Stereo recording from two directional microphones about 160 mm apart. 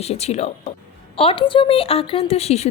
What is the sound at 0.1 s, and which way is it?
A woman's voice, 40° left (ahead or behind).